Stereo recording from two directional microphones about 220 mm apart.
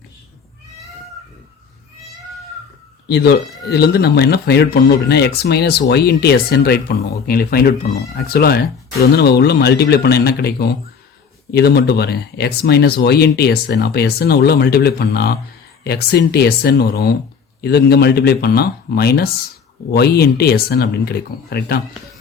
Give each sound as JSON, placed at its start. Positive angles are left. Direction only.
{"t": 3.7, "sound": "speech", "side_deg": 45}